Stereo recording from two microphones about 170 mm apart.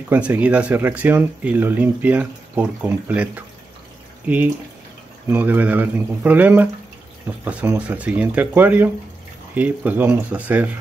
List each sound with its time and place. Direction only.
0.1 s speech: 10° right (ahead or behind)
5.3 s speech: 10° right (ahead or behind)